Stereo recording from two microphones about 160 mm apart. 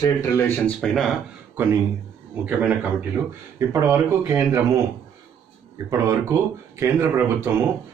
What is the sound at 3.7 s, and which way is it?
Speech, 15° right (ahead or behind).